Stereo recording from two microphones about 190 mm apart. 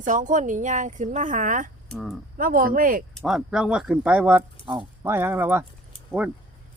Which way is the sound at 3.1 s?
Centre (ahead or behind).